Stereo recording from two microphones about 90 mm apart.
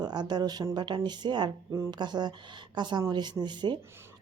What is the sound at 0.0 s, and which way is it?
A woman's voice, 55° right (ahead or behind).